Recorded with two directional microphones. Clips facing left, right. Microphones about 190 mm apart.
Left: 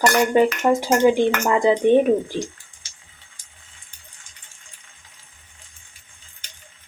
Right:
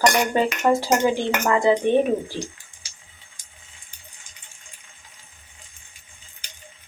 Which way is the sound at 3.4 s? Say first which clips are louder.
Even; 20° right (ahead or behind).